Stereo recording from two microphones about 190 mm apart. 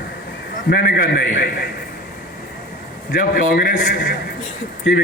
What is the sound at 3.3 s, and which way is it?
Speech, 45° left (ahead or behind).